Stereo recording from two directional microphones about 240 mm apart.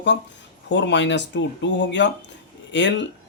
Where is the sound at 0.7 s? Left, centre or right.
Left.